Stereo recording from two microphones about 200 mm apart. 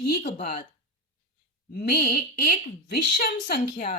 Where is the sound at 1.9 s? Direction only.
50° left (ahead or behind).